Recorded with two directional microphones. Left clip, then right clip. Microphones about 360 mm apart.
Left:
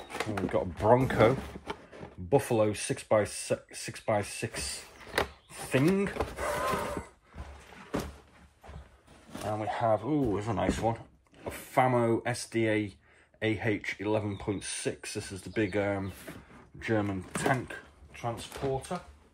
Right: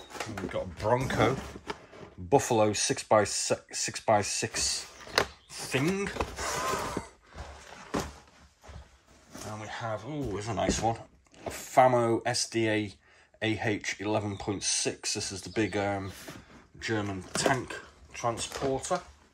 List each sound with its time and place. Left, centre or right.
0.3 s speech: centre
2.2 s speech: centre
9.6 s speech: centre
18.9 s speech: centre